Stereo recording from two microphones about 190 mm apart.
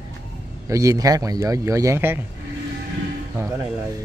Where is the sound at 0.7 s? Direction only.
15° right (ahead or behind).